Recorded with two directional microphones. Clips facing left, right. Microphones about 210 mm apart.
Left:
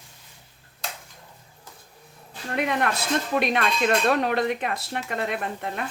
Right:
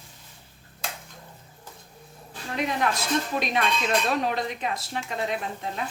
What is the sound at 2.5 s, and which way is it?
Speech, 60° left (ahead or behind).